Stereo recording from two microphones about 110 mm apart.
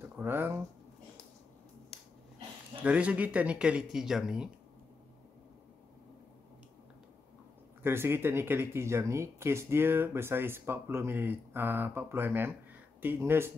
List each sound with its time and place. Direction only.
0.1 s speech: 20° right (ahead or behind)
2.8 s speech: 10° right (ahead or behind)
7.8 s speech: 20° right (ahead or behind)